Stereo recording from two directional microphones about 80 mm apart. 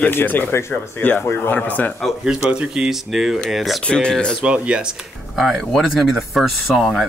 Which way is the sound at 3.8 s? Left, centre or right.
Centre.